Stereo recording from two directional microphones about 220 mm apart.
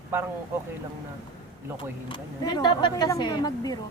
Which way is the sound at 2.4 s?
20° left (ahead or behind).